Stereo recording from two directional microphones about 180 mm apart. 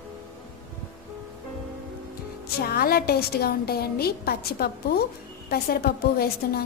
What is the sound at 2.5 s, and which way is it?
A woman's voice, 60° left (ahead or behind).